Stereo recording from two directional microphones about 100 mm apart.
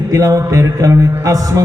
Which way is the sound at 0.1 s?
35° right (ahead or behind).